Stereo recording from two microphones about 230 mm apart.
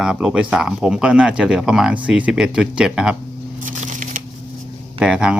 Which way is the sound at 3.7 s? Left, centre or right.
Right.